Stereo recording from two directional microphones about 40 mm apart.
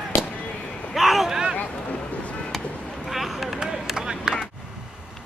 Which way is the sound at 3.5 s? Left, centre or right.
Centre.